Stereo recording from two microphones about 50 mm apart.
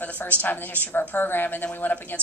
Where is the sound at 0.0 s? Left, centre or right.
Left.